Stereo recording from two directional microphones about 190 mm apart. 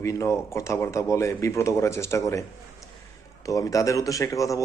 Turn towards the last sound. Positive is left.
turn(degrees=15)  # may be behind; listen again after turning